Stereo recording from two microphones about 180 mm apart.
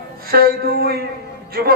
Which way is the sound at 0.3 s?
60° right (ahead or behind).